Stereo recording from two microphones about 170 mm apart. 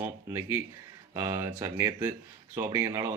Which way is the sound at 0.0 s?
15° right (ahead or behind).